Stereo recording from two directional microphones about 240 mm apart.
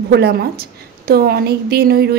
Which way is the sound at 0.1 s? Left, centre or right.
Right.